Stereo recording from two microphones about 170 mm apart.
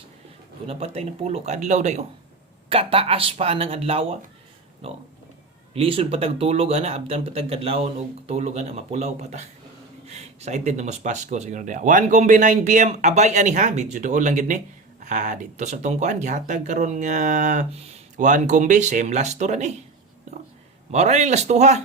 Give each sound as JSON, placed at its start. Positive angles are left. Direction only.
{"t": 0.7, "sound": "speech", "side_deg": -35}
{"t": 20.9, "sound": "speech", "side_deg": -40}